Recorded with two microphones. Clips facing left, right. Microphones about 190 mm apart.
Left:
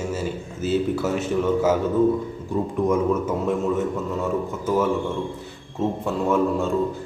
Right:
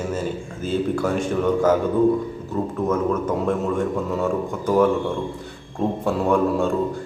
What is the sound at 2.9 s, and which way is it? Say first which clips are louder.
Speech: right 1 dB; 10° left (ahead or behind).